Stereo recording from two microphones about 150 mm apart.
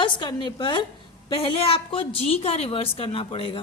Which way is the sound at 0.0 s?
30° left (ahead or behind).